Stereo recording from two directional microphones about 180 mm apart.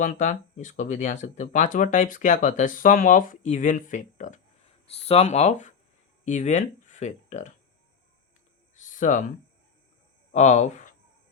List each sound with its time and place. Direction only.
0.0 s speech: 45° left (ahead or behind)
8.8 s a sound: 45° left (ahead or behind)
10.3 s speech: 40° left (ahead or behind)